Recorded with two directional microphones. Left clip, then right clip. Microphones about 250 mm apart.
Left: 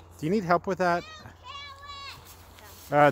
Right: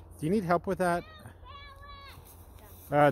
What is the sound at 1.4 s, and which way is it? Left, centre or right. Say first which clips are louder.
Children playing: left 8 dB; left.